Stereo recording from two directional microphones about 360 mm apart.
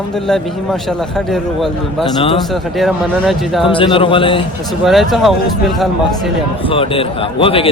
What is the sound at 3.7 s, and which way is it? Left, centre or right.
Speech, centre.